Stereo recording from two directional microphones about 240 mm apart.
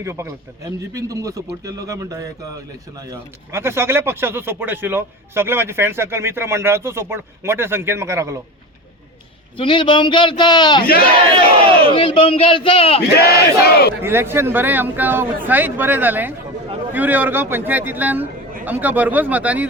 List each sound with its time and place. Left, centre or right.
0.0 s speech: centre
9.6 s a man's voice: centre
11.9 s a man's voice: left
13.1 s battle cry: left
14.0 s speech: centre